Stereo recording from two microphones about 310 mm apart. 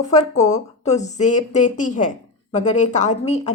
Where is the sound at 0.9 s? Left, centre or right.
Left.